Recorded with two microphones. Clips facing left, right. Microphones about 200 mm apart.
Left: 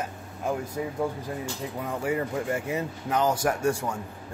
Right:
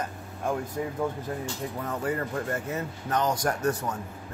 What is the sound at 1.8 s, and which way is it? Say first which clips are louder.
Speech: left 2 dB; 10° left (ahead or behind).